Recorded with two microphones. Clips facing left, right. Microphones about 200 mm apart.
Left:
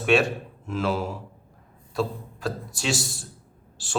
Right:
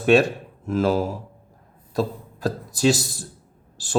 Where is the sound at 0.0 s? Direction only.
40° right (ahead or behind).